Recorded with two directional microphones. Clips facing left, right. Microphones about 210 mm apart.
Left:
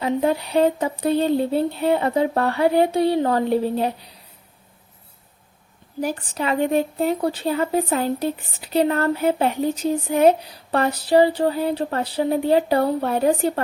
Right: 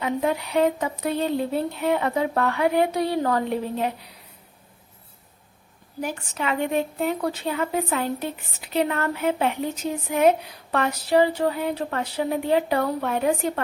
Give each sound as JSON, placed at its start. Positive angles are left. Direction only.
{"t": 0.0, "sound": "a woman's voice", "side_deg": 35}
{"t": 6.0, "sound": "a woman's voice", "side_deg": 35}